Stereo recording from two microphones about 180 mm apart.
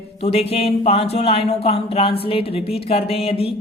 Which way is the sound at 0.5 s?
35° left (ahead or behind).